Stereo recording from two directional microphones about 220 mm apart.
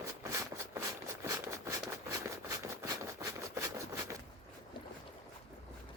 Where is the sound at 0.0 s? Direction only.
15° right (ahead or behind).